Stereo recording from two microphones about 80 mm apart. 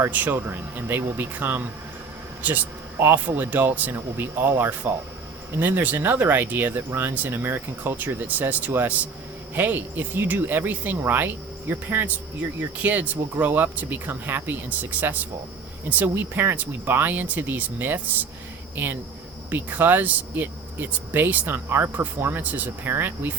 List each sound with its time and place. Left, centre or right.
0.0 s speech: right
3.0 s speech: right
19.5 s speech: right